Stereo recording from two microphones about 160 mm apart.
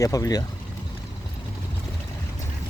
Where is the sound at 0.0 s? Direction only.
20° left (ahead or behind).